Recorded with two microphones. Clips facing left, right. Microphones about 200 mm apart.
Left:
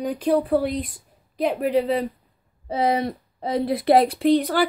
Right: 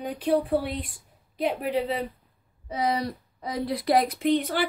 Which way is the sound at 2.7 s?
25° left (ahead or behind).